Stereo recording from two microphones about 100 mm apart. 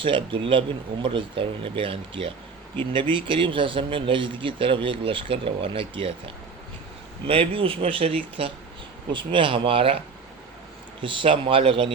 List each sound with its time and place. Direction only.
0.0 s speech: 55° right (ahead or behind)
9.1 s speech: 60° right (ahead or behind)
11.0 s speech: 60° right (ahead or behind)